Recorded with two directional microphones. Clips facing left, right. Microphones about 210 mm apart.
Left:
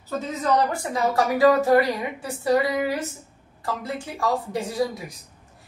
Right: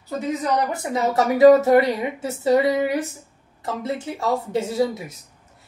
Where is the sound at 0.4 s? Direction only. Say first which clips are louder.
Left 1 dB; 20° right (ahead or behind).